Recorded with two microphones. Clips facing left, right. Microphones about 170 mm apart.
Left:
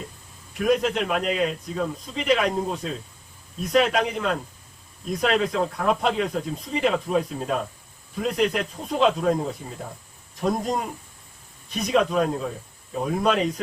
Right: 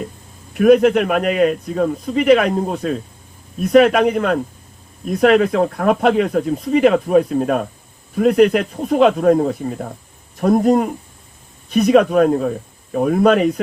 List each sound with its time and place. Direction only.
0.5 s speech: 60° right (ahead or behind)